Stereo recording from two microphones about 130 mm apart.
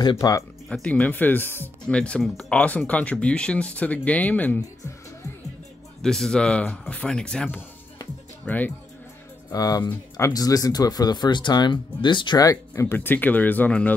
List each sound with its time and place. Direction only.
0.0 s speech: 35° left (ahead or behind)
0.7 s speech: 10° left (ahead or behind)
6.0 s speech: 5° left (ahead or behind)
9.5 s speech: 30° left (ahead or behind); by 13.9 s 10° left (ahead or behind)